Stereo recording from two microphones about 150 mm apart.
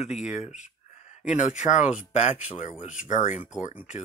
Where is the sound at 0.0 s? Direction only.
50° left (ahead or behind).